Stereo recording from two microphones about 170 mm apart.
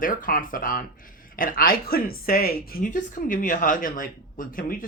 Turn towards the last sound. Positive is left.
turn(degrees=55)  # may be behind; listen again after turning